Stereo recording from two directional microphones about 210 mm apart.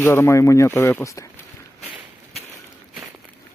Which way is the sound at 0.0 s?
10° left (ahead or behind).